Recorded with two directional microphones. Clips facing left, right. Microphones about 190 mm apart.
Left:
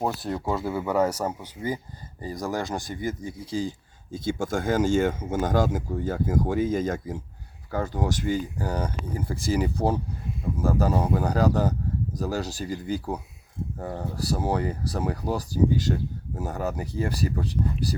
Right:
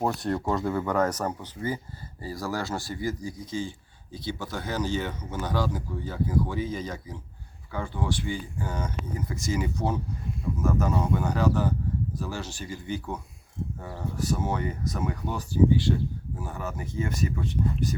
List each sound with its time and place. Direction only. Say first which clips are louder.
0.0 s a man's voice: right 1 dB; centre (ahead or behind); by 13.1 s 35° left (ahead or behind)
14.2 s speech: left 2 dB; 35° left (ahead or behind)